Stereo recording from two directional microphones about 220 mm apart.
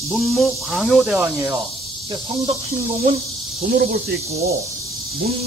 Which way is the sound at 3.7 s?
45° right (ahead or behind).